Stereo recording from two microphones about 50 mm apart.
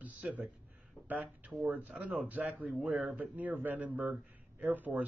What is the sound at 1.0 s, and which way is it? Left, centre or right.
A man's voice, right.